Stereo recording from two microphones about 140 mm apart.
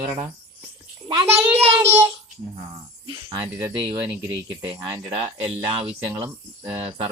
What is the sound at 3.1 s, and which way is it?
Speech, 35° right (ahead or behind).